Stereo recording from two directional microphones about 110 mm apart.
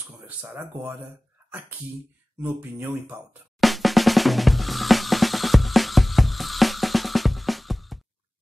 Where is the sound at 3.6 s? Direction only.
Centre (ahead or behind).